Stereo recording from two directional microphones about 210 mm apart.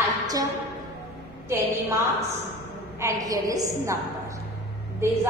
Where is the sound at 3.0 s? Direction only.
15° right (ahead or behind).